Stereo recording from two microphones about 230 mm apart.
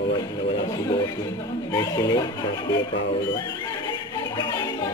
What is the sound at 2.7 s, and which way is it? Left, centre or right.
Speech, left.